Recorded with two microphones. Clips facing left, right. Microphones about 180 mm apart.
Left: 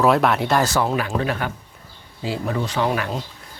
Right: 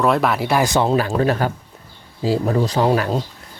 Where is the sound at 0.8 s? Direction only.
30° right (ahead or behind).